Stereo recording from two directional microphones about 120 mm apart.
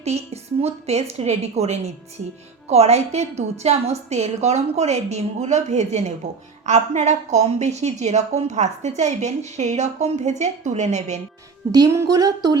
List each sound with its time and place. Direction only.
0.6 s a woman's voice: 65° right (ahead or behind)
11.7 s speech: 25° right (ahead or behind)